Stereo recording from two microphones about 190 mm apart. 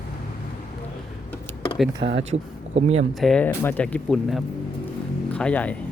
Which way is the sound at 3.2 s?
5° left (ahead or behind).